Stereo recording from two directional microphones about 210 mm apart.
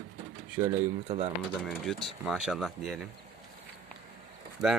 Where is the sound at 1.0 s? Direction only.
30° right (ahead or behind).